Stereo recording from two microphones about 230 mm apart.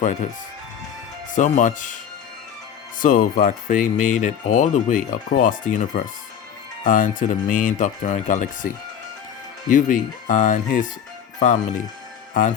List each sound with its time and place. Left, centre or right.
0.0 s speech: left
1.4 s speech: left
3.0 s speech: left